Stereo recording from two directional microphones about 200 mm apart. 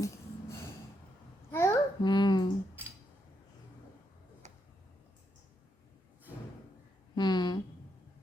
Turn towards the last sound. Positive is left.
turn(degrees=20)  # may be behind; listen again after turning